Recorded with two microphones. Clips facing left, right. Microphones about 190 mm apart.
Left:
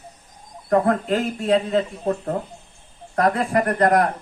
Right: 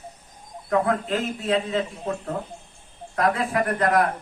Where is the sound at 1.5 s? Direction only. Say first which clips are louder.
Left 5 dB; 45° left (ahead or behind).